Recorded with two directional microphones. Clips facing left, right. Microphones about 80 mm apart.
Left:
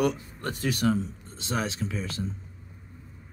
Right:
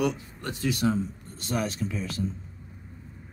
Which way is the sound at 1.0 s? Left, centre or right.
Left.